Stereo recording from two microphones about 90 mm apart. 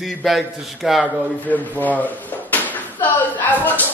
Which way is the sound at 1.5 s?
20° left (ahead or behind).